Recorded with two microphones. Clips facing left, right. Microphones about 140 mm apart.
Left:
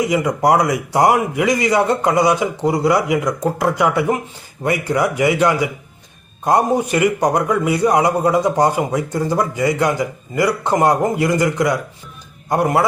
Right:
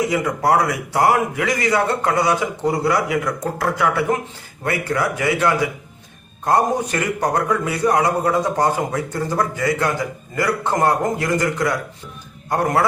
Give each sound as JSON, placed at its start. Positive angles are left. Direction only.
{"t": 0.1, "sound": "a man's voice", "side_deg": 15}